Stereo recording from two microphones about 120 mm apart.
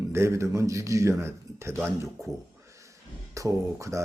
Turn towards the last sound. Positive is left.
turn(degrees=-25)  # may be behind; listen again after turning